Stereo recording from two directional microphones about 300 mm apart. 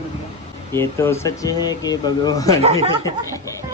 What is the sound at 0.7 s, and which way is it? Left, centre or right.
Speech, centre.